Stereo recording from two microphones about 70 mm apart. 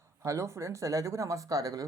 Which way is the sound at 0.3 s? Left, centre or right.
Right.